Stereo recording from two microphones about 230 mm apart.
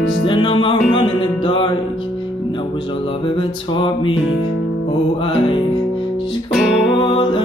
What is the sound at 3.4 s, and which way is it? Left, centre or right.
Music, left.